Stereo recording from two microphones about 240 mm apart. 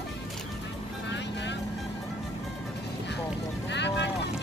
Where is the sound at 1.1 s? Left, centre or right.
Left.